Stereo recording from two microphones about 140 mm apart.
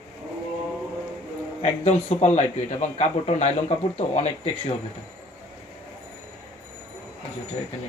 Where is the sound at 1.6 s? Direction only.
55° left (ahead or behind).